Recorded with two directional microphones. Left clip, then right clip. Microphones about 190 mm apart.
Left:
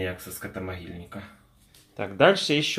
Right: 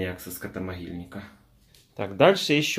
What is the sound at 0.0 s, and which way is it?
Speech, 25° right (ahead or behind).